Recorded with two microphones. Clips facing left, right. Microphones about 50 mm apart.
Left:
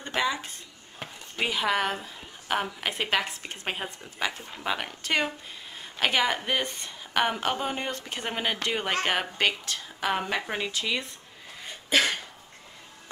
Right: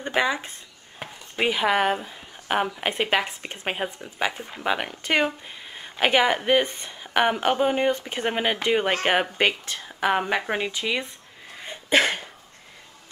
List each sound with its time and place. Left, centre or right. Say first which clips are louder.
0.0 s speech: right 4 dB; centre
11.6 s sneeze: right 4 dB; right